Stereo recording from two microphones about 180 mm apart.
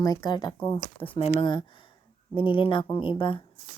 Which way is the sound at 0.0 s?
20° left (ahead or behind).